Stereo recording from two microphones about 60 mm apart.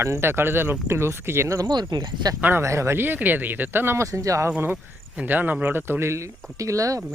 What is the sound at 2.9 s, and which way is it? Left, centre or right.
Speech, right.